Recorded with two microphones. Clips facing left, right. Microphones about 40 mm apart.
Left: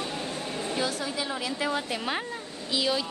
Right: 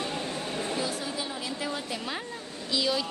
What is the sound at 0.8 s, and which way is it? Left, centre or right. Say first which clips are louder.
A woman's voice: left 2 dB; left.